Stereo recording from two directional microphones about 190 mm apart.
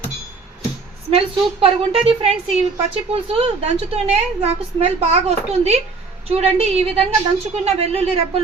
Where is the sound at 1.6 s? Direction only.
30° right (ahead or behind).